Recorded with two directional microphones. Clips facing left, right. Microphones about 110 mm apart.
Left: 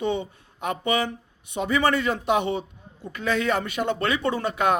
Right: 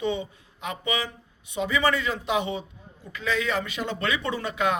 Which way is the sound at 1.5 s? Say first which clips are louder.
Even; 35° left (ahead or behind).